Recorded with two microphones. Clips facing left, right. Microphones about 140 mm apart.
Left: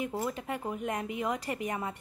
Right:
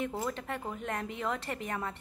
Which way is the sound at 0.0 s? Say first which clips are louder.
Left 1 dB; 5° left (ahead or behind).